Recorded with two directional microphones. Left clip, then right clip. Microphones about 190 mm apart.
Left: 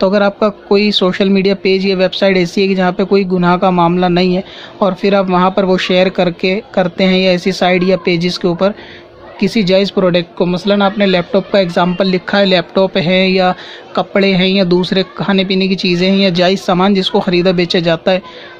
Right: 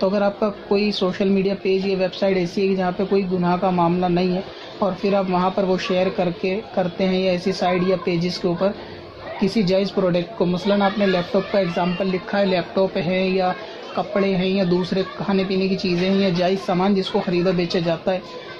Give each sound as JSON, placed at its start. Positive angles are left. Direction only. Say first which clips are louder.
{"t": 0.0, "sound": "speech", "louder": "left 8 dB", "side_deg": 35}